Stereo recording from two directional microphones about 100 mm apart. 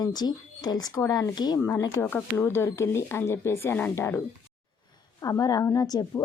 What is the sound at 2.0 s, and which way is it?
Speech, 15° left (ahead or behind).